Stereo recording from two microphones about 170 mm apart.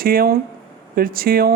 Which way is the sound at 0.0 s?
60° right (ahead or behind).